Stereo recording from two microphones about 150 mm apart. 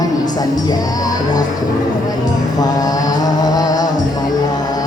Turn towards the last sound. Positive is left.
turn(degrees=25)  # may be behind; listen again after turning